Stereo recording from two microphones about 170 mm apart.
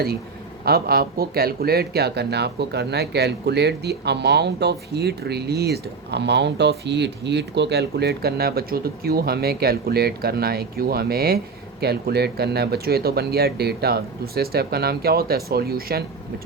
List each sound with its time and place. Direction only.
0.6 s speech: 65° right (ahead or behind)